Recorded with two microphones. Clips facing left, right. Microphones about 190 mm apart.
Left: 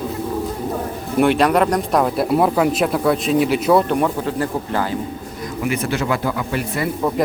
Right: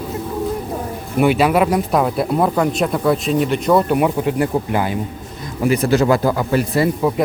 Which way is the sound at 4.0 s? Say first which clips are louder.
Right 3 dB; 15° right (ahead or behind).